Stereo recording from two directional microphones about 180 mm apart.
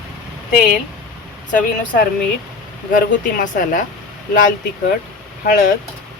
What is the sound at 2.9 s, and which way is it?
Speech, 45° left (ahead or behind).